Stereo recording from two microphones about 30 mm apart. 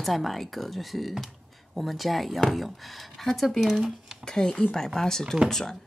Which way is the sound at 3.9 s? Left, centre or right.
Centre.